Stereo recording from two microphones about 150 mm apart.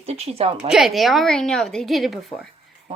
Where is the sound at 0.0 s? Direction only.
45° right (ahead or behind).